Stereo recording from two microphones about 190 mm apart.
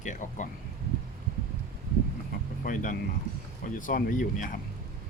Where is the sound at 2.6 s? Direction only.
45° left (ahead or behind).